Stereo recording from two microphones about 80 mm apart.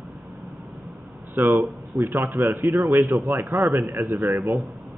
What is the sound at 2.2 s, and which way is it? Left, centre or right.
A man's voice, right.